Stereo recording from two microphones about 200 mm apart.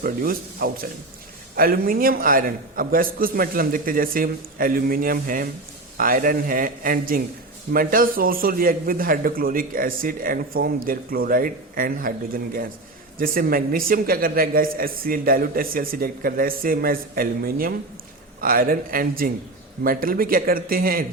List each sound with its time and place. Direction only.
0.0 s a man's voice: 45° right (ahead or behind)